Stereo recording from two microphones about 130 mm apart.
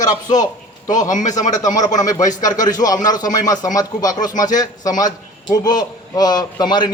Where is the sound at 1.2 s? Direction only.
70° left (ahead or behind).